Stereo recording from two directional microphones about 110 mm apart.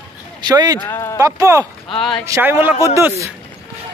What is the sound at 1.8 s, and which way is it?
Speech, 50° left (ahead or behind).